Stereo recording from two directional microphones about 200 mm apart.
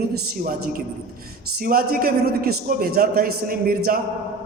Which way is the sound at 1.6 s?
45° right (ahead or behind).